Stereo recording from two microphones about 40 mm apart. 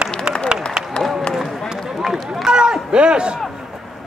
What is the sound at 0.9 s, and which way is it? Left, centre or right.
Run, left.